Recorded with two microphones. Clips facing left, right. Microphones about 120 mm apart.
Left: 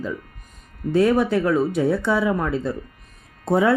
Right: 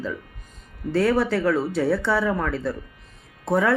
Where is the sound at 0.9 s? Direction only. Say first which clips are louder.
Left 3 dB; 15° left (ahead or behind).